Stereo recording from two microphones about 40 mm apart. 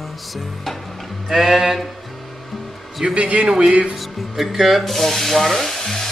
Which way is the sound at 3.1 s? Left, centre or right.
Right.